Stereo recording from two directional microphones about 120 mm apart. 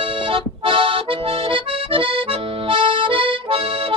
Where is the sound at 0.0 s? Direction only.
50° right (ahead or behind).